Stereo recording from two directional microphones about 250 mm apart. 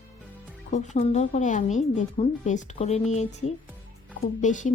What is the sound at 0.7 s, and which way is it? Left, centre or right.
A woman's voice, left.